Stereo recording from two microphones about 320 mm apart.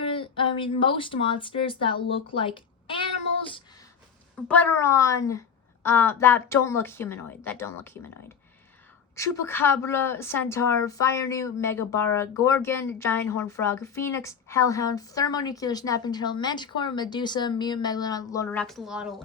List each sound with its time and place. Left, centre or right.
0.0 s speech: centre
2.3 s a sound: centre
4.4 s a woman's voice: centre
9.1 s a woman's voice: centre